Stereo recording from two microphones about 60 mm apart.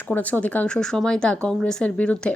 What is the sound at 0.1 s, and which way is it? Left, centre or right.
Speech, left.